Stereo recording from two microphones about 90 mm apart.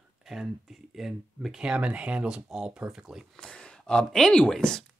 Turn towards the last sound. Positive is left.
turn(degrees=5)  # may be behind; listen again after turning